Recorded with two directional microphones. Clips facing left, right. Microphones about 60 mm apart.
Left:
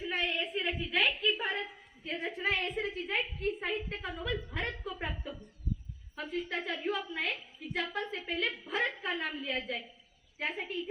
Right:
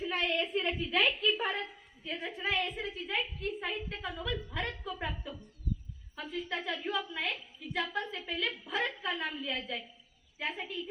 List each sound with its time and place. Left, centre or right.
0.0 s a sound: centre
1.4 s a woman's voice: centre
2.4 s a woman's voice: left
3.8 s a woman's voice: left